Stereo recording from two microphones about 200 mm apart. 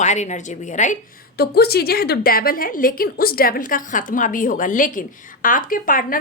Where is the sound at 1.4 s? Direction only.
50° left (ahead or behind).